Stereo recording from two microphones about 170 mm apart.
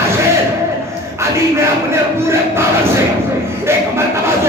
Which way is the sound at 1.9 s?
15° right (ahead or behind).